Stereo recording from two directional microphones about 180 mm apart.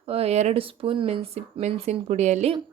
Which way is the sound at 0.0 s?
35° right (ahead or behind).